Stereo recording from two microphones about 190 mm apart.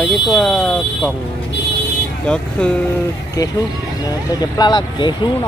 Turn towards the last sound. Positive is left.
turn(degrees=25)  # may be behind; listen again after turning